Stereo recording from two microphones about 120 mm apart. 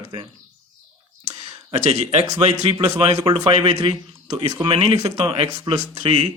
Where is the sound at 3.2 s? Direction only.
50° right (ahead or behind).